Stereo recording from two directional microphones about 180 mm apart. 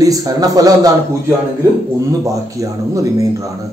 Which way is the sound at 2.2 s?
20° right (ahead or behind).